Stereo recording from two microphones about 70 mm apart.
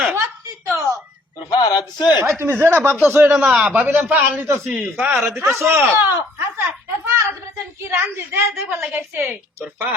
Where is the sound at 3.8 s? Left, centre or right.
Right.